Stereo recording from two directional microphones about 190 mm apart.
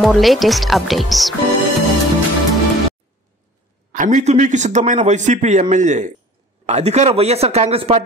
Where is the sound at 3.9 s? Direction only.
40° right (ahead or behind).